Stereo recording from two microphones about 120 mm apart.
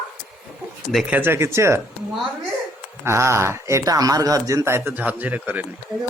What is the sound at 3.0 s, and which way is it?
Speech, 20° right (ahead or behind).